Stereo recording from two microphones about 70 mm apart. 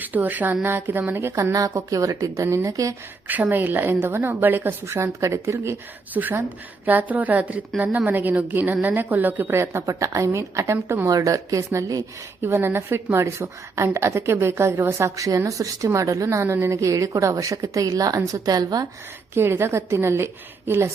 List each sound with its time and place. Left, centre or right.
0.0 s a woman's voice: right
1.5 s a woman's voice: right
3.2 s a woman's voice: right
6.1 s a woman's voice: right
12.4 s a woman's voice: right
19.3 s a woman's voice: right